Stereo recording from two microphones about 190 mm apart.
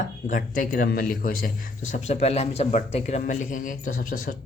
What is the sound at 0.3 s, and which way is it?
Speech, 45° left (ahead or behind).